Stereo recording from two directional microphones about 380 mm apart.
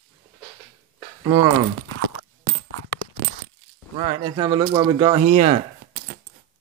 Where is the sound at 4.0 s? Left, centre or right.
Centre.